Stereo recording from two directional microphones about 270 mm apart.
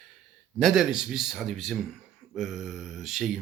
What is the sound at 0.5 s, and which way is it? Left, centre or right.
Speech, centre.